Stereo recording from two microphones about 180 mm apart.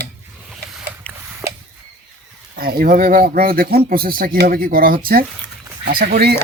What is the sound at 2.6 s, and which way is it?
Speech, 55° right (ahead or behind).